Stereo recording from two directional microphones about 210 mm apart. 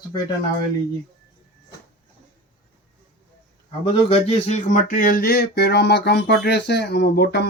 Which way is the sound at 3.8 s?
30° left (ahead or behind).